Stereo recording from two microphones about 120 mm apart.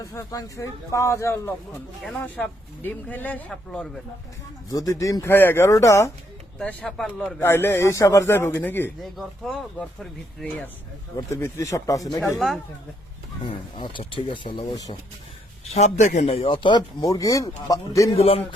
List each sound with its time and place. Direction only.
0.0 s speech: 25° left (ahead or behind)
2.0 s speech: 5° left (ahead or behind)
4.7 s speech: 30° left (ahead or behind)
6.6 s speech: 5° left (ahead or behind)
7.3 s speech: 20° left (ahead or behind)
9.1 s speech: centre (ahead or behind)
11.3 s speech: 20° left (ahead or behind)
13.4 s speech: 40° left (ahead or behind)
15.7 s a man's voice: 70° left (ahead or behind)
16.2 s speech: 50° left (ahead or behind)
17.0 s speech: 30° left (ahead or behind)
18.2 s a man's voice: 55° left (ahead or behind)